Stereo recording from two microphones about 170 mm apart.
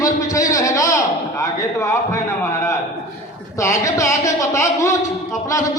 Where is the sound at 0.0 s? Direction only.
20° left (ahead or behind).